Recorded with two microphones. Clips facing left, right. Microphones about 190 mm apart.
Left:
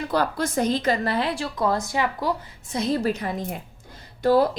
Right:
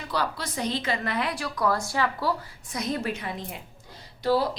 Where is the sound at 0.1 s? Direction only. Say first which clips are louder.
Left 5 dB; 50° left (ahead or behind).